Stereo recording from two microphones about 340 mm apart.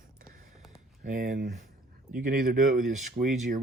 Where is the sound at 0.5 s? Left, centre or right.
Centre.